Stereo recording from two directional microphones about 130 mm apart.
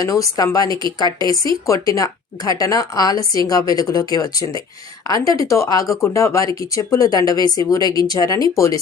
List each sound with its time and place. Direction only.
0.0 s speech: 30° left (ahead or behind)
0.7 s a woman's voice: 40° right (ahead or behind)
0.9 s speech: 30° left (ahead or behind)